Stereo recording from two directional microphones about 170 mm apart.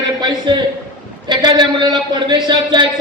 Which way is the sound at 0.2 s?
25° right (ahead or behind).